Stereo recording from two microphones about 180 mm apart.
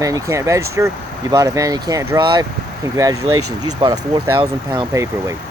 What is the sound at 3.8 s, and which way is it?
Speech, 25° right (ahead or behind).